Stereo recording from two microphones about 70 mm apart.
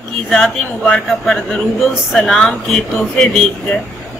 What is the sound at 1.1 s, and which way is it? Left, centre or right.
A man's voice, centre.